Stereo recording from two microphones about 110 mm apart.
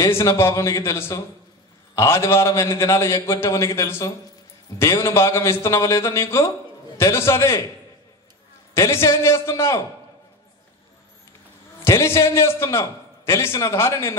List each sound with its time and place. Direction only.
0.0 s a man's voice: 30° left (ahead or behind)
8.7 s a man's voice: 25° left (ahead or behind)
11.8 s a man's voice: 25° left (ahead or behind)